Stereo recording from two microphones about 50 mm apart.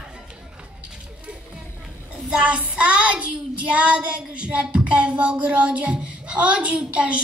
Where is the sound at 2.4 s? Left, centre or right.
Right.